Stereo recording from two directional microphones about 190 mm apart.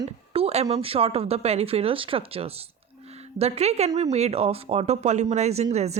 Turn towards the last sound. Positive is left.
turn(degrees=-35)  # may be behind; listen again after turning